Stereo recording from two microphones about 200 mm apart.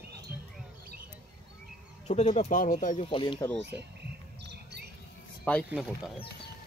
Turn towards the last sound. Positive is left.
turn(degrees=-5)  # may be behind; listen again after turning